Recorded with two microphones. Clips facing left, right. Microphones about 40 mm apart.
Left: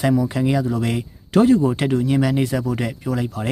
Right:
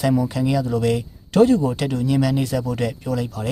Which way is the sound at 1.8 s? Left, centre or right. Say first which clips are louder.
Left 2 dB; left.